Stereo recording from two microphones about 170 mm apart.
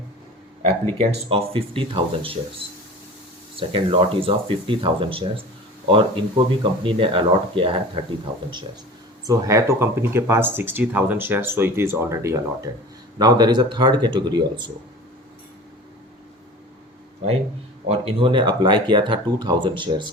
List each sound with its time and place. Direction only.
0.6 s speech: 35° right (ahead or behind)
9.2 s speech: 20° right (ahead or behind)
17.8 s speech: 35° right (ahead or behind)